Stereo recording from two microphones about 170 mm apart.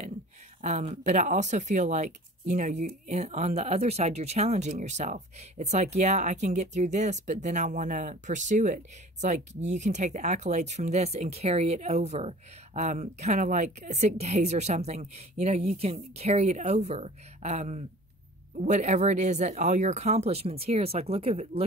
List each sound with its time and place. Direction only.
0.6 s speech: 40° right (ahead or behind)